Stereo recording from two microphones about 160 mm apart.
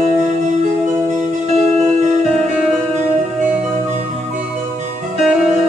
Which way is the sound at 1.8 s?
45° right (ahead or behind).